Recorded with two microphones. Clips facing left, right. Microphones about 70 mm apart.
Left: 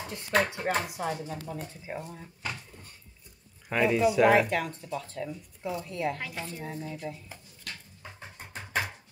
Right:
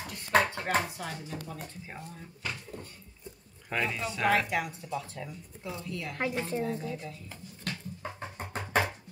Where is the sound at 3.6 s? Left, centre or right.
Centre.